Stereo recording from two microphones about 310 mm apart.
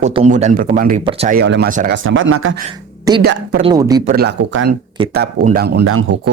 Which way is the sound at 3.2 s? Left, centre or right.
Right.